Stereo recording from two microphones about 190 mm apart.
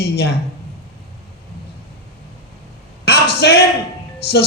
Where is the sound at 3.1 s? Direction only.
60° left (ahead or behind).